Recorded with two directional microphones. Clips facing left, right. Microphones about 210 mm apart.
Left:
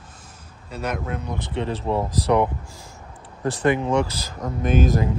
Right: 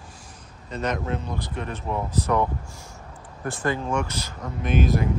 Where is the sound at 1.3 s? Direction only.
25° left (ahead or behind).